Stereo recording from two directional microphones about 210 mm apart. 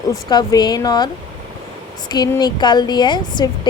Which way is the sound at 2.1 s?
20° left (ahead or behind).